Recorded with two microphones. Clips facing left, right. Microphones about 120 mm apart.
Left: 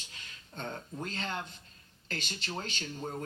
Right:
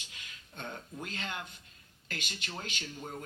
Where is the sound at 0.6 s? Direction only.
35° left (ahead or behind).